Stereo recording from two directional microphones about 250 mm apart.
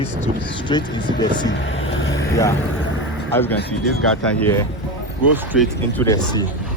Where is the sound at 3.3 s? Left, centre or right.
Centre.